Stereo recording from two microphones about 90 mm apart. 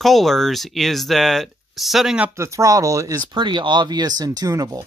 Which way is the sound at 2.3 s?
35° right (ahead or behind).